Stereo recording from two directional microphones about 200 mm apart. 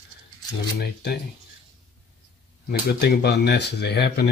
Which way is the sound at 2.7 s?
55° left (ahead or behind).